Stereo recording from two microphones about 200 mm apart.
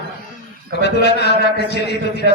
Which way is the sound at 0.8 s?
55° left (ahead or behind).